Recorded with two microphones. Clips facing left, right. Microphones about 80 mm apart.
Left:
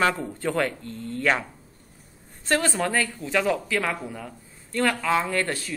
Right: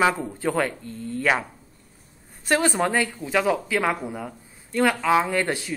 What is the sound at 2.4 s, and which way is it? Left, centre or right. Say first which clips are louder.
Speech: right 2 dB; centre.